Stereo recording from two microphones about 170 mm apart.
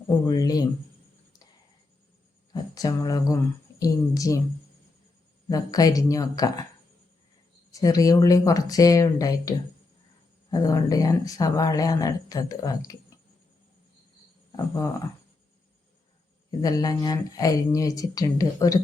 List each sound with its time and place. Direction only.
0.3 s speech: 20° left (ahead or behind)
2.5 s speech: 25° left (ahead or behind)
5.5 s speech: 20° left (ahead or behind)
7.7 s speech: 20° left (ahead or behind)
14.5 s speech: 20° left (ahead or behind)
16.5 s speech: 20° left (ahead or behind)